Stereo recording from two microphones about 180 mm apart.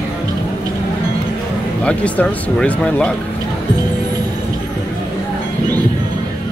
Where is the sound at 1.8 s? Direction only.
5° left (ahead or behind).